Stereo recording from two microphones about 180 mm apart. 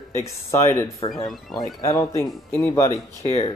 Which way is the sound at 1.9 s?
15° left (ahead or behind).